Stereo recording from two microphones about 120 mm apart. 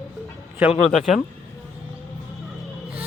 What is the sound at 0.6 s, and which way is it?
Speech, 10° right (ahead or behind).